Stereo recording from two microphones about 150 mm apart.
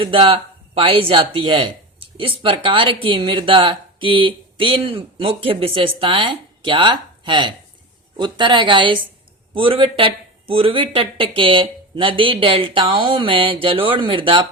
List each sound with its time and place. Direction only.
0.0 s speech: 35° right (ahead or behind)